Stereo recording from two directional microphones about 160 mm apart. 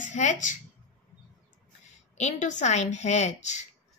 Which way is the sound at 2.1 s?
45° left (ahead or behind).